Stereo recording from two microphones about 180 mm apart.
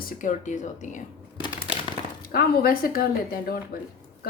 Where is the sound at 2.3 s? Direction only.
55° left (ahead or behind).